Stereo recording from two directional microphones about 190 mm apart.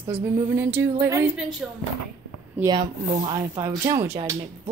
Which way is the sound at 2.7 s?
25° right (ahead or behind).